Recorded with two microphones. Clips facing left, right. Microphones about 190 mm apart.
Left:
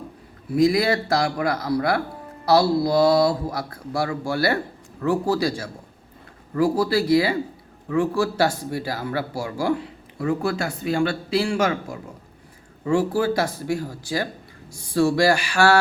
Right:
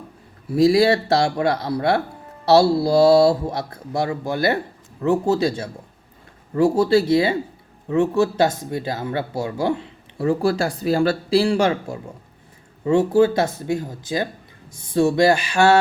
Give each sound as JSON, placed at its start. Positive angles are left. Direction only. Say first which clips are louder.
{"t": 0.5, "sound": "speech", "louder": "right 3 dB", "side_deg": -30}